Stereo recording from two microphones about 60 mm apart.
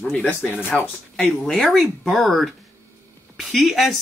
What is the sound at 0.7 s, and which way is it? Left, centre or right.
Speech, centre.